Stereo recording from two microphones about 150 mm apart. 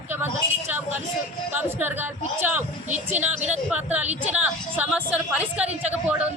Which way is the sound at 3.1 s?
50° right (ahead or behind).